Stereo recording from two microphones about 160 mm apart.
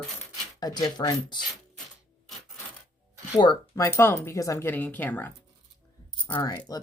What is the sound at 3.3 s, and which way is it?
Speech, 25° left (ahead or behind).